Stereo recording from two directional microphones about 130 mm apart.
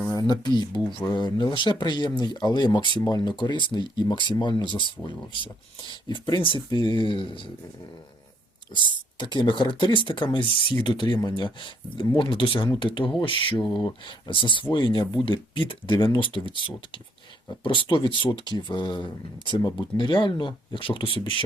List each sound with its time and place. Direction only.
0.1 s a sound: 30° left (ahead or behind)
0.9 s speech: 35° left (ahead or behind)
5.9 s speech: 35° left (ahead or behind)
9.1 s speech: 35° left (ahead or behind)